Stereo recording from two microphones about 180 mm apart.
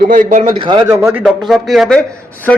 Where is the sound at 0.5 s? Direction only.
25° right (ahead or behind); by 2.0 s centre (ahead or behind).